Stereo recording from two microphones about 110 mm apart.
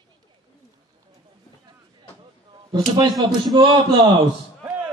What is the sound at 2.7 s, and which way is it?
Speech, 35° right (ahead or behind).